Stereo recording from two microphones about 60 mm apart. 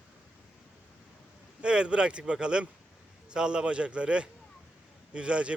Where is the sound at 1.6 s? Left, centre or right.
Centre.